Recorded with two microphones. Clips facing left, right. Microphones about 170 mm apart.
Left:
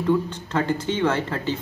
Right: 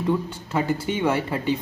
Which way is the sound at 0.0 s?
10° right (ahead or behind).